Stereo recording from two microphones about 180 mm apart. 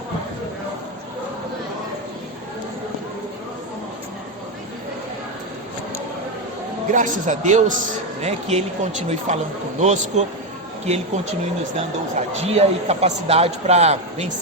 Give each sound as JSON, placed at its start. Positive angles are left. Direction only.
{"t": 6.9, "sound": "a man's voice", "side_deg": -45}